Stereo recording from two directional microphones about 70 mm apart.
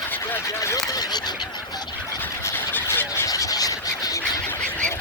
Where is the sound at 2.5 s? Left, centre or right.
Left.